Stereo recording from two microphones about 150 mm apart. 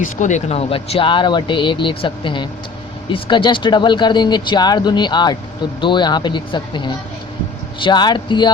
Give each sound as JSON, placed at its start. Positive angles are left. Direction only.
{"t": 0.0, "sound": "speech", "side_deg": 55}